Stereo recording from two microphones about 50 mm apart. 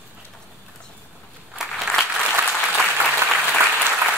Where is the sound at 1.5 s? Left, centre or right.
Centre.